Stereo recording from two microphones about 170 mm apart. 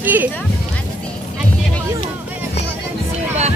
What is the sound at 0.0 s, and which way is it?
Music, 10° right (ahead or behind).